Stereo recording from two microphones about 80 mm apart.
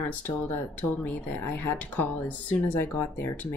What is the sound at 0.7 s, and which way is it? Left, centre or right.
Speech, left.